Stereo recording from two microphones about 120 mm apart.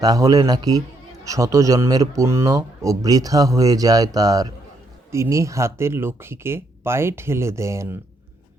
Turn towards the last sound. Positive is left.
turn(degrees=-25)  # may be behind; listen again after turning